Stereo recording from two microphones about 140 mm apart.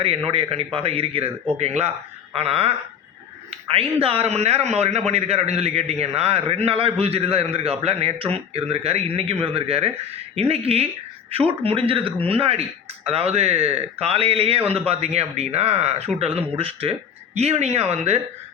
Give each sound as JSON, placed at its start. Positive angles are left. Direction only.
{"t": 0.3, "sound": "a man's voice", "side_deg": -45}
{"t": 4.0, "sound": "a man's voice", "side_deg": -45}